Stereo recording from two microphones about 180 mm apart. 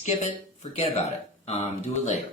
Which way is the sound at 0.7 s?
35° left (ahead or behind).